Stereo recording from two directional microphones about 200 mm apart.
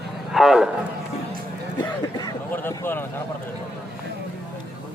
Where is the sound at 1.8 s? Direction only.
15° left (ahead or behind).